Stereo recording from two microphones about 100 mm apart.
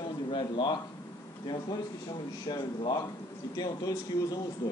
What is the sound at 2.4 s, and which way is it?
Speech, 45° left (ahead or behind).